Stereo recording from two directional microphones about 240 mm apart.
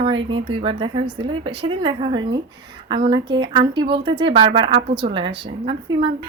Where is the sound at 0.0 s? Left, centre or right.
Right.